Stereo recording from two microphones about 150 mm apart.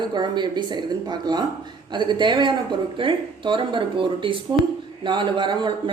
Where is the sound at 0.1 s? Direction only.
30° right (ahead or behind).